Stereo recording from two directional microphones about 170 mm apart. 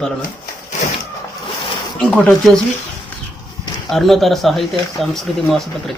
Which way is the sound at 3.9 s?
Centre (ahead or behind).